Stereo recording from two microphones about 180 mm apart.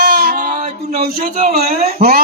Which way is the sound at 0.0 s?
60° right (ahead or behind).